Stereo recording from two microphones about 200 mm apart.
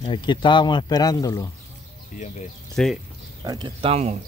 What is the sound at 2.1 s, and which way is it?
Speech, 35° left (ahead or behind).